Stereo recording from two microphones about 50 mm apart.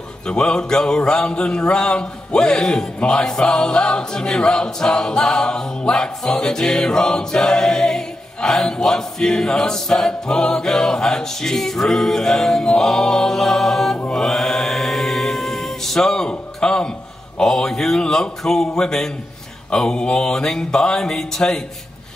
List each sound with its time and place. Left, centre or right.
0.3 s a capella: centre
14.1 s chant: centre
16.3 s a sound: centre
17.4 s a capella: centre